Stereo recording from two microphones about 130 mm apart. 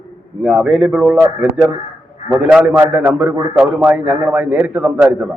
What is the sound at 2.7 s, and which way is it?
A man's voice, 15° right (ahead or behind).